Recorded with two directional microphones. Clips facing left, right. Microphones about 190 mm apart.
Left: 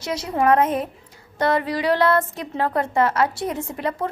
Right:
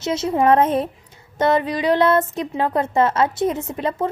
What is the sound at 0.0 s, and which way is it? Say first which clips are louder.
A woman's voice: right 3 dB; 25° right (ahead or behind).